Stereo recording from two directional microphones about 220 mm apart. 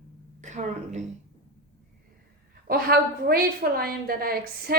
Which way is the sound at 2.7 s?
45° right (ahead or behind).